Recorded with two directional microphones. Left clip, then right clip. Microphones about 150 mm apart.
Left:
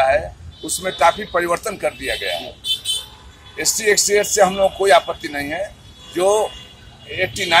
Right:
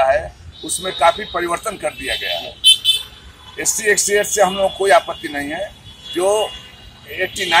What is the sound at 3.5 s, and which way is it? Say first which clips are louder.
Speech: even; 5° left (ahead or behind).